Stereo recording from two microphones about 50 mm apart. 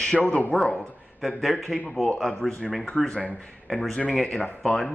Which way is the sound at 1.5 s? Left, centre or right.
Centre.